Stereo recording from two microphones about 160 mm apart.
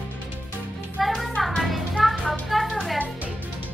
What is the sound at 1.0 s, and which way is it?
Music, centre (ahead or behind).